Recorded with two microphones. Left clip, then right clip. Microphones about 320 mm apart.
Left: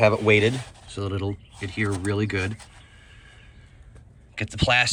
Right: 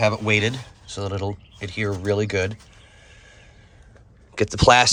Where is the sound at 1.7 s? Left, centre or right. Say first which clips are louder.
Right 4 dB; centre.